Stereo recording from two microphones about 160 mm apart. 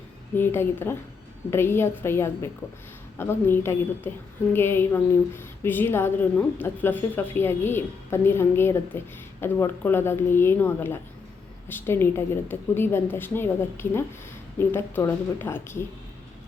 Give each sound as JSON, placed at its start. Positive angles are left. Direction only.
{"t": 0.3, "sound": "a woman's voice", "side_deg": 15}